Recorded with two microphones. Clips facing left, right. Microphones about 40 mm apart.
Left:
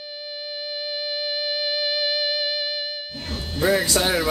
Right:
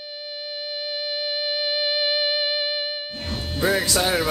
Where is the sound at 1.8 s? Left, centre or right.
Centre.